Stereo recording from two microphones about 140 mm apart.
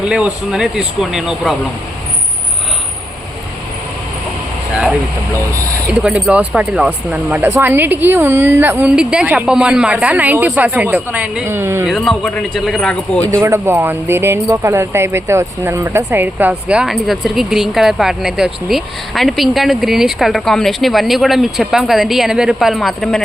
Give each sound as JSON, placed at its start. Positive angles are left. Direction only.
{"t": 0.0, "sound": "speech", "side_deg": -5}
{"t": 4.7, "sound": "speech", "side_deg": -10}
{"t": 11.9, "sound": "speech", "side_deg": 0}
{"t": 13.2, "sound": "speech", "side_deg": -20}